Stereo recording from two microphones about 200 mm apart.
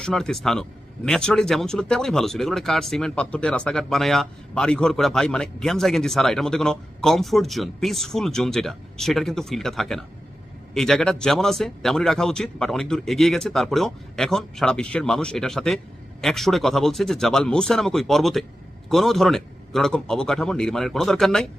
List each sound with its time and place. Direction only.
0.0 s speech: 5° left (ahead or behind)